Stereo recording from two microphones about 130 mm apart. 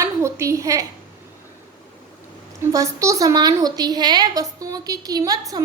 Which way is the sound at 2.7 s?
25° right (ahead or behind).